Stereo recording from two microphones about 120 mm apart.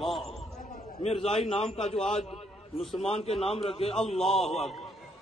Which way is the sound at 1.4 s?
55° left (ahead or behind).